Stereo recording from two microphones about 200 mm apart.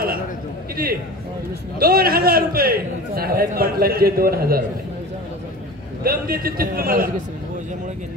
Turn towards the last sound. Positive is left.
turn(degrees=-45)  # may be behind; listen again after turning